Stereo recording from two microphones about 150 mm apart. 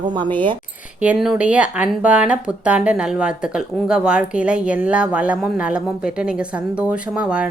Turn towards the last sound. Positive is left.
turn(degrees=-5)  # may be behind; listen again after turning